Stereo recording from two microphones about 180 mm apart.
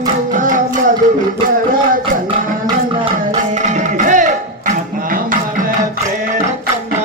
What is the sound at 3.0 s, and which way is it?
Music, 40° right (ahead or behind).